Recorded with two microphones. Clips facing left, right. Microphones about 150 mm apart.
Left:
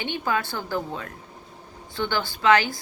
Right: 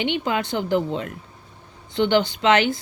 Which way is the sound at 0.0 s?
20° right (ahead or behind).